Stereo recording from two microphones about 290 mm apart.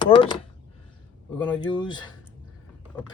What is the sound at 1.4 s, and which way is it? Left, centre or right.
Speech, centre.